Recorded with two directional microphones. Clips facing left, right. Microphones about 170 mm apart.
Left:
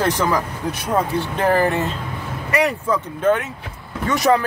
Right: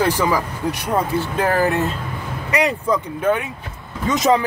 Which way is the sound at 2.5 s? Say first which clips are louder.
Even; 15° right (ahead or behind).